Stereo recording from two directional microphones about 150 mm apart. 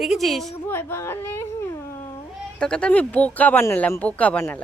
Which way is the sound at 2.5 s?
5° left (ahead or behind).